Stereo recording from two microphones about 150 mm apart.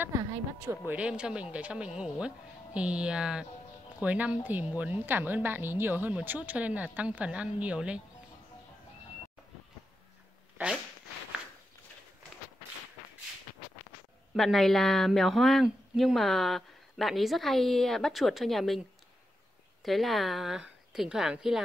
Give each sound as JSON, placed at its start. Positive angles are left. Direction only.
{"t": 0.0, "sound": "a woman's voice", "side_deg": -20}
{"t": 14.3, "sound": "speech", "side_deg": 0}